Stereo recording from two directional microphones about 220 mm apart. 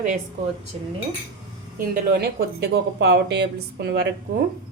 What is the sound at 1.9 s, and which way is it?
A woman's voice, 45° right (ahead or behind).